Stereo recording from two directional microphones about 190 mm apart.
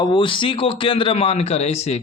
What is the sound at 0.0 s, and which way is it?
Speech, 25° left (ahead or behind).